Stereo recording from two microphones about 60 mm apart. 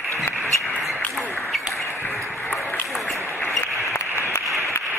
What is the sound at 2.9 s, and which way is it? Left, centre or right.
Applause, centre.